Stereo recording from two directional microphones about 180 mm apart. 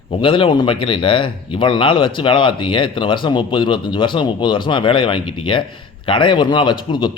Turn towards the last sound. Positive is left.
turn(degrees=25)  # may be behind; listen again after turning